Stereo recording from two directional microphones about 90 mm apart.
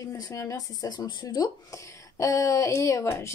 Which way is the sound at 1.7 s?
35° left (ahead or behind).